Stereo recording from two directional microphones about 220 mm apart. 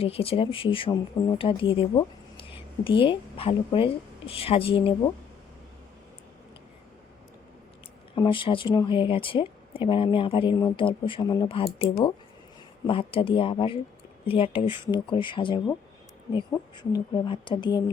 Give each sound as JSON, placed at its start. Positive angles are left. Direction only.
{"t": 0.0, "sound": "speech", "side_deg": 25}
{"t": 8.1, "sound": "speech", "side_deg": 20}